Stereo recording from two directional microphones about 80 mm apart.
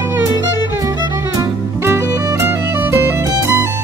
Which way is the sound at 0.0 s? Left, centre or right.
Right.